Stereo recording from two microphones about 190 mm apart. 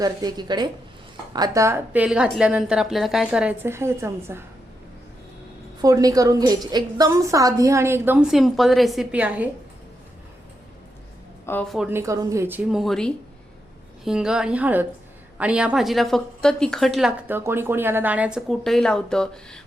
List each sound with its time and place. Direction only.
0.0 s a woman's voice: 20° right (ahead or behind)
5.8 s a woman's voice: 20° right (ahead or behind)
11.4 s a woman's voice: 5° left (ahead or behind)
11.9 s a woman's voice: 15° right (ahead or behind); by 19.6 s 5° left (ahead or behind)